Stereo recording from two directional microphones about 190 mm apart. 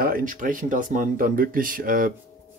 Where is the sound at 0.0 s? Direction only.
50° right (ahead or behind).